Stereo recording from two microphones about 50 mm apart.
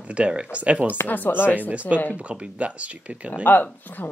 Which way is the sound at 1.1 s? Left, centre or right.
Left.